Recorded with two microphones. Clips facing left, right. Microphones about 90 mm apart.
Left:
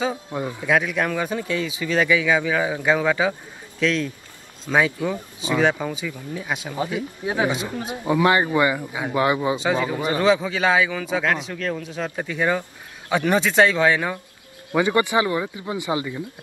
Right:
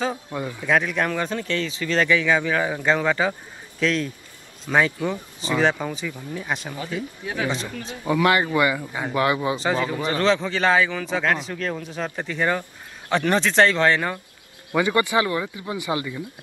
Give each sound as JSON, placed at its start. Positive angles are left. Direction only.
{"t": 0.3, "sound": "a man's voice", "side_deg": 20}
{"t": 0.7, "sound": "a man's voice", "side_deg": 5}
{"t": 5.4, "sound": "a man's voice", "side_deg": 5}
{"t": 6.7, "sound": "a man's voice", "side_deg": 20}
{"t": 9.6, "sound": "a man's voice", "side_deg": 0}
{"t": 9.9, "sound": "a man's voice", "side_deg": 15}
{"t": 14.7, "sound": "a man's voice", "side_deg": 20}